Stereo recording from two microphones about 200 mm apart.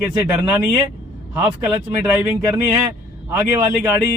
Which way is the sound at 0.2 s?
10° right (ahead or behind).